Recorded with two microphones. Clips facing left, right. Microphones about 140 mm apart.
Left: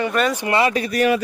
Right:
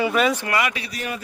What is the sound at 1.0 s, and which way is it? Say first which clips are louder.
Speech: left 14 dB; 90° left.